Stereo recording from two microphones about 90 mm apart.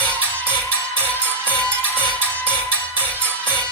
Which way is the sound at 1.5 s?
15° left (ahead or behind).